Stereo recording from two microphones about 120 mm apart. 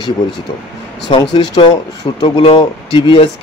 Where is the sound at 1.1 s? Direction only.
45° left (ahead or behind).